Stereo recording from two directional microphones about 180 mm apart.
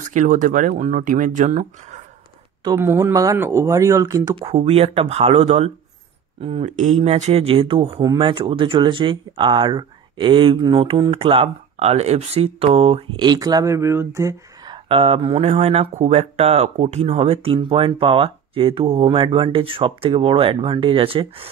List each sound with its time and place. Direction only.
0.0 s speech: 45° right (ahead or behind)
2.8 s speech: 15° right (ahead or behind); by 7.9 s 30° right (ahead or behind)
7.9 s speech: 20° right (ahead or behind)
14.9 s speech: 35° right (ahead or behind)